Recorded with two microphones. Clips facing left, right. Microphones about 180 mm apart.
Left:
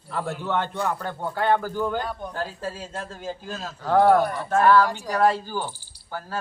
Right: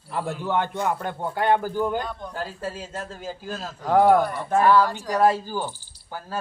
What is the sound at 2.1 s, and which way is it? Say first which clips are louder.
Speech: left 2 dB; 10° left (ahead or behind).